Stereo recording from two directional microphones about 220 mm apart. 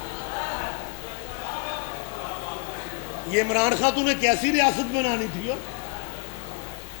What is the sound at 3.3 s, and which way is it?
A man's voice, 15° left (ahead or behind).